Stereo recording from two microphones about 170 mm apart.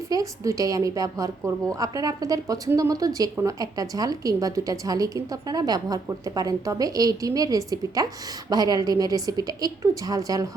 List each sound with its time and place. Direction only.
0.1 s a woman's voice: 20° right (ahead or behind)